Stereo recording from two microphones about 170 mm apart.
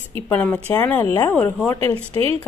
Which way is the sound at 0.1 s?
10° left (ahead or behind).